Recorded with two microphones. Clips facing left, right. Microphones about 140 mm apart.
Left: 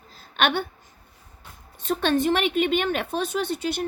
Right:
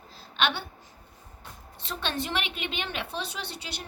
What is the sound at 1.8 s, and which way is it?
A woman's voice, 50° left (ahead or behind).